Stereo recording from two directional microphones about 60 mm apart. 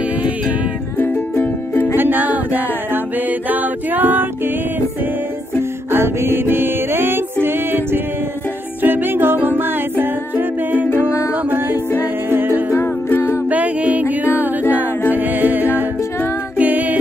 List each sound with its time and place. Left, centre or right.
0.9 s music: left
2.0 s music: right
5.6 s music: right
12.0 s music: right
12.7 s music: left
13.5 s music: right
14.0 s music: left
14.7 s music: right